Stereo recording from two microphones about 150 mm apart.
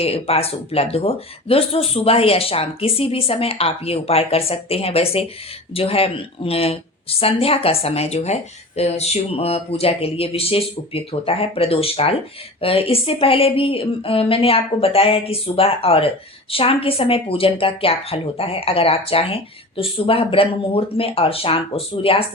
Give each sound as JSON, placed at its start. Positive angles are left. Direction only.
{"t": 0.0, "sound": "speech", "side_deg": 40}